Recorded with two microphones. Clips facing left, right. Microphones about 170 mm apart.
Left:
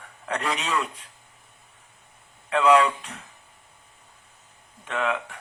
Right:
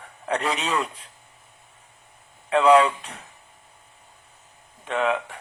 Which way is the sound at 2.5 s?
30° right (ahead or behind).